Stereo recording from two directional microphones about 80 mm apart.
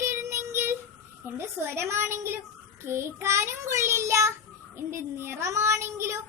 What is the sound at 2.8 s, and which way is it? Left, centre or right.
Child singing, right.